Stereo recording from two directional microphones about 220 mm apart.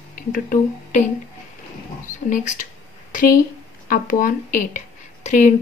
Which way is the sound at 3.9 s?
40° left (ahead or behind).